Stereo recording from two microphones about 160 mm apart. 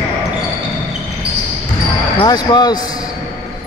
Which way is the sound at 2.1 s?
25° left (ahead or behind).